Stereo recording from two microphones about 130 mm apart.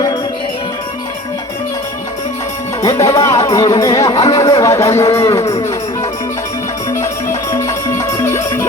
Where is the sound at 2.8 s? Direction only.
25° left (ahead or behind).